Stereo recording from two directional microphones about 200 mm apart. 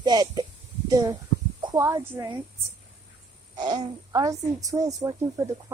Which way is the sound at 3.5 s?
20° right (ahead or behind).